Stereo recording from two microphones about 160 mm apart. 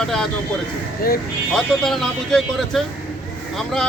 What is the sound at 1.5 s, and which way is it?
Speech, centre (ahead or behind).